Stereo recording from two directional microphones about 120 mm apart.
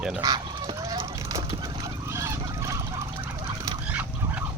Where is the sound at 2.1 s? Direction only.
25° right (ahead or behind).